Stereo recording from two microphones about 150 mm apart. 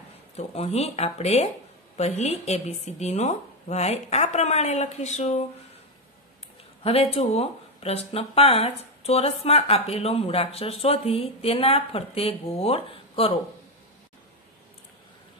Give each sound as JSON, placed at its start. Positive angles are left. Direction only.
{"t": 0.4, "sound": "speech", "side_deg": 45}
{"t": 6.8, "sound": "speech", "side_deg": 40}